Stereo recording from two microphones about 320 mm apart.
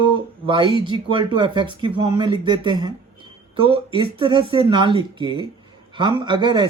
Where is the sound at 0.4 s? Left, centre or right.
Centre.